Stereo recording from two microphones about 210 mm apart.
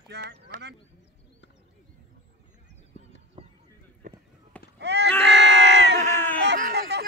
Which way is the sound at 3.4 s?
25° right (ahead or behind).